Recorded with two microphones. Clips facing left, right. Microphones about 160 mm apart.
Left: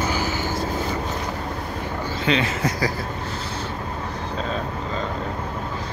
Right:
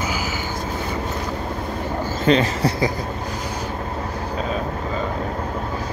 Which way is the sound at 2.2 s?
40° right (ahead or behind).